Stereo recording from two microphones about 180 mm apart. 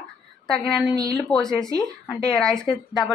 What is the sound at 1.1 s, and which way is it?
A woman's voice, 5° left (ahead or behind).